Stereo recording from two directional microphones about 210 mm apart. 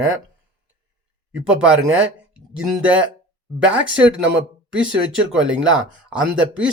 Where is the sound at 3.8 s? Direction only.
60° right (ahead or behind).